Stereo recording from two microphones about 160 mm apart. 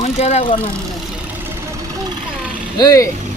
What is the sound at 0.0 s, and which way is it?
Speech, 40° left (ahead or behind).